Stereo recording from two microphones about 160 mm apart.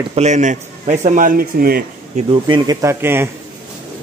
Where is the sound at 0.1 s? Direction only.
45° right (ahead or behind); by 1.9 s 70° right (ahead or behind).